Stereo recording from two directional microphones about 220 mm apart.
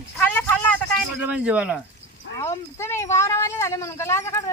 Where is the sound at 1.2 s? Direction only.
5° right (ahead or behind).